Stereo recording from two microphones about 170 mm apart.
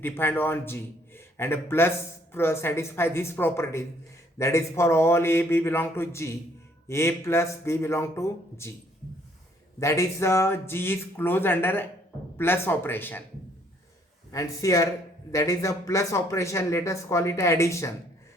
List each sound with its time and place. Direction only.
0.0 s a man's voice: 10° left (ahead or behind)
9.8 s speech: 15° left (ahead or behind)
14.3 s speech: 20° left (ahead or behind)